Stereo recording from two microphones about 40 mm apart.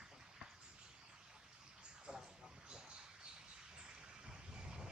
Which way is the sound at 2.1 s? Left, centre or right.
Right.